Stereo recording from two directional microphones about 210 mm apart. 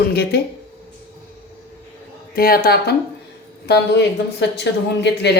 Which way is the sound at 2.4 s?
45° left (ahead or behind).